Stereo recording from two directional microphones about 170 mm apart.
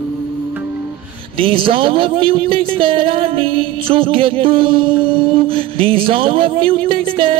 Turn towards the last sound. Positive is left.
turn(degrees=-30)  # may be behind; listen again after turning